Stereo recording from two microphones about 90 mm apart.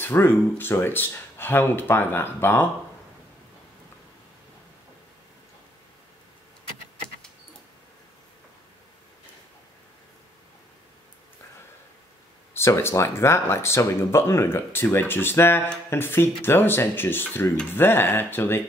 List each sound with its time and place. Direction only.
0.0 s speech: 25° left (ahead or behind)
12.5 s speech: 30° left (ahead or behind)